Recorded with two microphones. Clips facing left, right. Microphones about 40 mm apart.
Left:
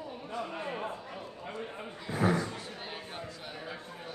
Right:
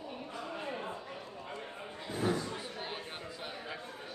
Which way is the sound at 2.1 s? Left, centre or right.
Left.